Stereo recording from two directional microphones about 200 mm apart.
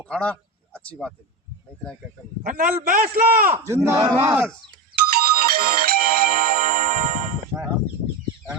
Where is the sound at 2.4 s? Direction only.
45° right (ahead or behind).